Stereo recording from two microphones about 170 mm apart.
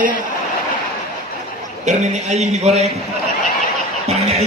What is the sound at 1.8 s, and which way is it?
Speech, 45° right (ahead or behind).